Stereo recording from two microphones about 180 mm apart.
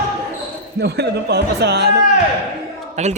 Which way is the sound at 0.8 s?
65° right (ahead or behind).